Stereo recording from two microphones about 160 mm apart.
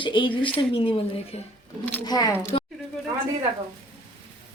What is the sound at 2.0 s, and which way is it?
Speech, 25° left (ahead or behind).